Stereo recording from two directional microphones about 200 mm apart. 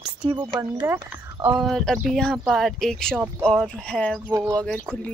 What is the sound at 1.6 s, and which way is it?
Speech, centre (ahead or behind).